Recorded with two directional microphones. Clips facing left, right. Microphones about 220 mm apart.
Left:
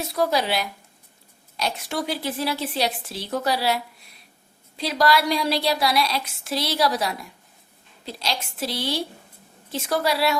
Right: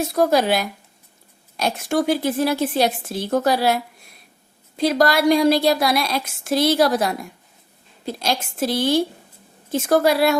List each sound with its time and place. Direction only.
0.0 s a woman's voice: 50° right (ahead or behind)